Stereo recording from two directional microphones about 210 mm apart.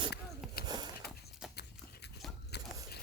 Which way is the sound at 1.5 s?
50° left (ahead or behind).